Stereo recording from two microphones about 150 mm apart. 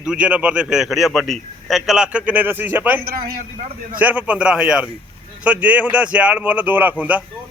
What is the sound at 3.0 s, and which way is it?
Speech, 85° right.